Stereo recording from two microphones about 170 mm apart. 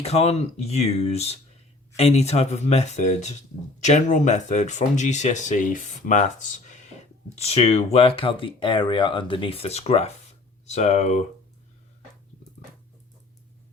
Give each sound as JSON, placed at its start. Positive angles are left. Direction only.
{"t": 0.0, "sound": "speech", "side_deg": 40}